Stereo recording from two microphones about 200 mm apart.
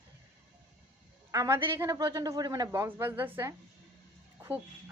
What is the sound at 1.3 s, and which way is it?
A woman's voice, 15° right (ahead or behind).